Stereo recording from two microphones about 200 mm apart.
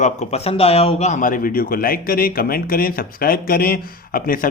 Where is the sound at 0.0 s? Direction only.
35° left (ahead or behind).